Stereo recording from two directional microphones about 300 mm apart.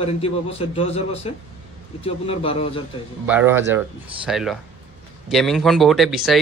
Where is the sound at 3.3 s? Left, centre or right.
Centre.